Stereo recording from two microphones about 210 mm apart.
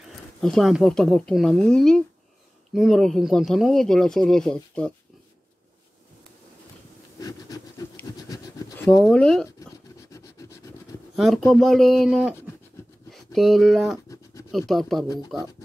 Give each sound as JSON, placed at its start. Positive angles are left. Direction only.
{"t": 0.4, "sound": "speech", "side_deg": 0}
{"t": 7.2, "sound": "scratch", "side_deg": 15}
{"t": 8.9, "sound": "speech", "side_deg": 0}
{"t": 10.1, "sound": "scratch", "side_deg": 15}
{"t": 11.1, "sound": "speech", "side_deg": 0}
{"t": 12.8, "sound": "a sound", "side_deg": 10}
{"t": 13.1, "sound": "speech", "side_deg": 0}
{"t": 14.0, "sound": "a sound", "side_deg": 15}
{"t": 14.7, "sound": "speech", "side_deg": 0}